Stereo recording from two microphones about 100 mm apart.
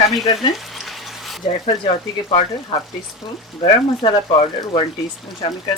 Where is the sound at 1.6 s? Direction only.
60° left (ahead or behind).